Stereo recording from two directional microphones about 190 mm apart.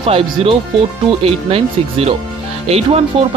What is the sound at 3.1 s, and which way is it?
Speech, 30° right (ahead or behind).